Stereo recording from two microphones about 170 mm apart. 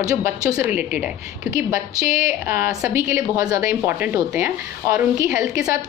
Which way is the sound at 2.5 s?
15° right (ahead or behind).